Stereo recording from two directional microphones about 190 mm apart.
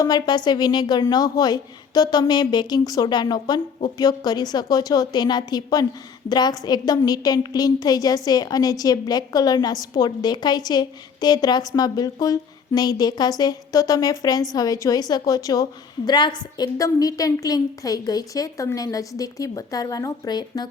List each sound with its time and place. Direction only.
0.0 s a woman's voice: 20° left (ahead or behind)